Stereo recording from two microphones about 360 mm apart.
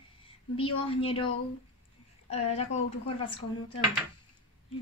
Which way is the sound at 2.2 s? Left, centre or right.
Centre.